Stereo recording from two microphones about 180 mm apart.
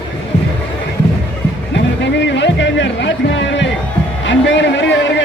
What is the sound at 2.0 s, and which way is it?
Music, 80° left.